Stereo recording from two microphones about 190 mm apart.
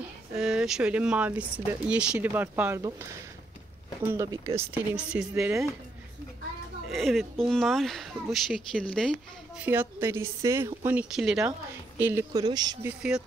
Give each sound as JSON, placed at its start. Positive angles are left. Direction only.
{"t": 0.3, "sound": "speech", "side_deg": -5}
{"t": 6.9, "sound": "speech", "side_deg": 0}
{"t": 9.6, "sound": "speech", "side_deg": -10}
{"t": 12.8, "sound": "speech", "side_deg": -5}